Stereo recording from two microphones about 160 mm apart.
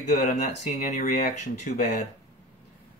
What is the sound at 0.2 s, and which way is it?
Speech, 50° left (ahead or behind).